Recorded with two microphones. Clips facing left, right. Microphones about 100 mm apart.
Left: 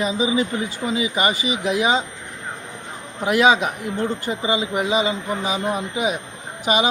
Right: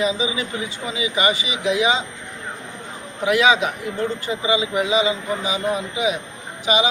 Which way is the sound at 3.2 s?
45° left (ahead or behind).